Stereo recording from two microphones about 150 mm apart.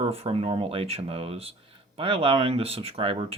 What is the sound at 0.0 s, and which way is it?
Speech, 40° right (ahead or behind).